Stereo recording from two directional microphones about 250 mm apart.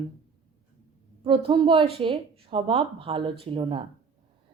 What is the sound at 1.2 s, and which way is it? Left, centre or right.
A woman's voice, right.